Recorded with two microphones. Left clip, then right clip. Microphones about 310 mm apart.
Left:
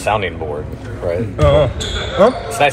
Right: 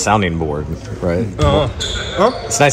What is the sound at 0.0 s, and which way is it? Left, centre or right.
Speech, right.